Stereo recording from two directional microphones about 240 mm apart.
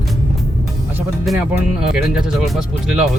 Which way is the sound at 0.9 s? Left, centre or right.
Centre.